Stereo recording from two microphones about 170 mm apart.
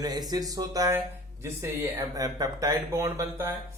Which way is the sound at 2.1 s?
20° right (ahead or behind).